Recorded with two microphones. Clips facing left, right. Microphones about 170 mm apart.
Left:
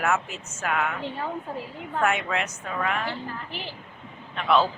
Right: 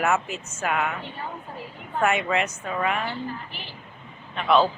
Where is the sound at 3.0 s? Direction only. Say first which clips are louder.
Right 1 dB; 90° left.